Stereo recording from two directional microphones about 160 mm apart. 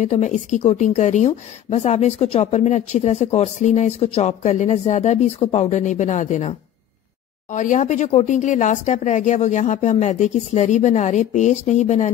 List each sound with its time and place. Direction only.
0.0 s a woman's voice: 50° left (ahead or behind)
7.5 s a woman's voice: 50° left (ahead or behind)